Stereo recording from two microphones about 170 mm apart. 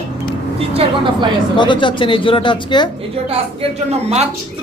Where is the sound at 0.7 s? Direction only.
30° right (ahead or behind).